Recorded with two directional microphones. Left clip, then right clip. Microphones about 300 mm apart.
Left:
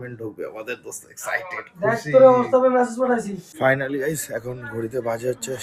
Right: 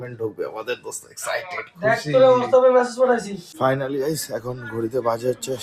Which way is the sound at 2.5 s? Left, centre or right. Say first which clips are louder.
Right 2 dB; centre.